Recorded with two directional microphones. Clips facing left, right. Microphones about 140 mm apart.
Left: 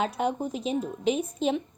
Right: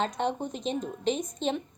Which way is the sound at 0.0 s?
5° left (ahead or behind).